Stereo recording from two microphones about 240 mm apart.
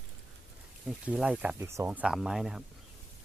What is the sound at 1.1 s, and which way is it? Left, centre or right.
Speech, centre.